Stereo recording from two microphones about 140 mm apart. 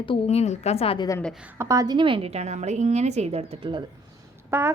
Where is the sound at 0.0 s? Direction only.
40° left (ahead or behind).